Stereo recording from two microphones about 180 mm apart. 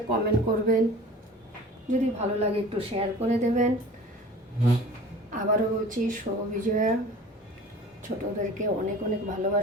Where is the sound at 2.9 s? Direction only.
40° right (ahead or behind).